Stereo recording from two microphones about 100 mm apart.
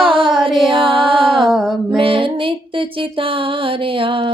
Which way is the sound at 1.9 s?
60° right (ahead or behind).